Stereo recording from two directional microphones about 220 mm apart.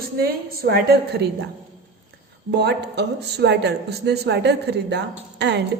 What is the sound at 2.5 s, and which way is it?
Speech, 50° right (ahead or behind).